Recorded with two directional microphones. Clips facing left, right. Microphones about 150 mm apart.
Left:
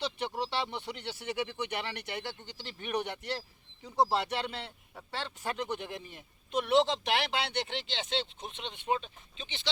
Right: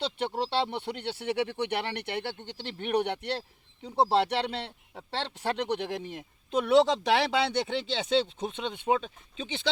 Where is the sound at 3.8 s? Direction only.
30° right (ahead or behind).